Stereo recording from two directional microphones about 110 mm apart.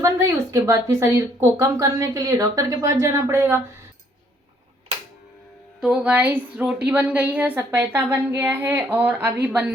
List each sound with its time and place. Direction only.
0.0 s speech: 30° right (ahead or behind)
5.8 s a woman's voice: 10° right (ahead or behind)